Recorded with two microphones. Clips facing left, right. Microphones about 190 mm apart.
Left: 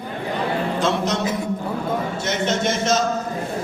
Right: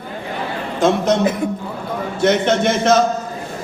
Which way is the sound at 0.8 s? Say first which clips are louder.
Right 10 dB; 55° right (ahead or behind).